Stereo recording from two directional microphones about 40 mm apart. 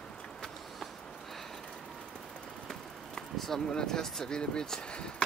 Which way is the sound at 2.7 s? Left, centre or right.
Centre.